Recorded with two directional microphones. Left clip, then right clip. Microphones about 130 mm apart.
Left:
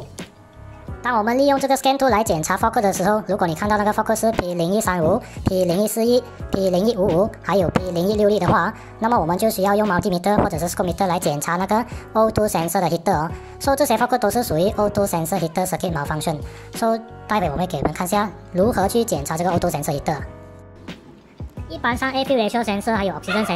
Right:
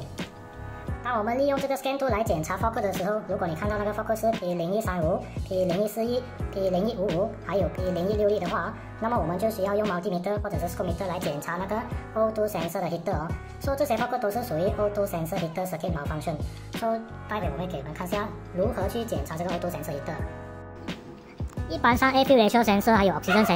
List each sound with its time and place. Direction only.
1.0 s a woman's voice: 35° left (ahead or behind)
21.6 s speech: 5° right (ahead or behind)